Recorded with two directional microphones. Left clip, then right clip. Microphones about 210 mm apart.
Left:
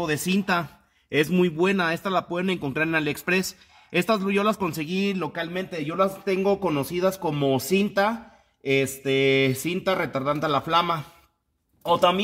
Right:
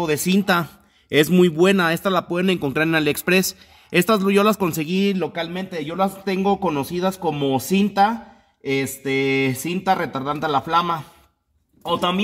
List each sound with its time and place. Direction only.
0.0 s a man's voice: 20° right (ahead or behind); by 12.2 s centre (ahead or behind)